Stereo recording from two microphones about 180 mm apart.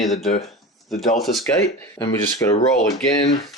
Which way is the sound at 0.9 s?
Centre (ahead or behind).